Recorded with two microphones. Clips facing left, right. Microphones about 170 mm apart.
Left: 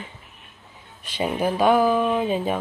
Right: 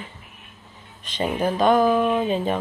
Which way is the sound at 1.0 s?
10° left (ahead or behind).